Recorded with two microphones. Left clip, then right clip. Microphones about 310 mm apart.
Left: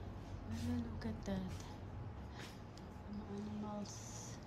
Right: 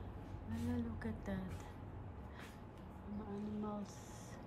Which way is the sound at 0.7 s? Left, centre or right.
Centre.